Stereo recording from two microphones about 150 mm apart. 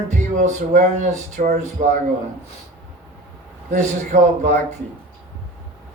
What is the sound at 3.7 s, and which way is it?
Speech, 55° right (ahead or behind).